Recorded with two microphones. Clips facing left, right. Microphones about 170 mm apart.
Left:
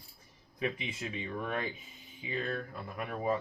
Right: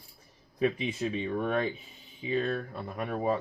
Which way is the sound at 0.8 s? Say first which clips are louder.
Right 8 dB; 30° right (ahead or behind).